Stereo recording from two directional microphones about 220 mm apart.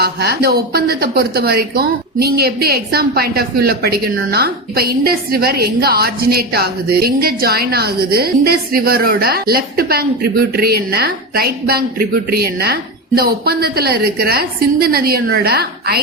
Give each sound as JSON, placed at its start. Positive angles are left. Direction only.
{"t": 0.0, "sound": "a woman's voice", "side_deg": -45}